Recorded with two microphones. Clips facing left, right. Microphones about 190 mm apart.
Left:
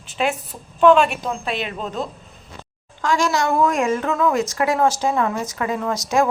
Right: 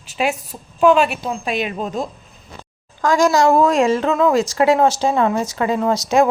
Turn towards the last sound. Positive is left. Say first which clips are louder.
# right 4 dB
turn(degrees=-25)  # may be behind; listen again after turning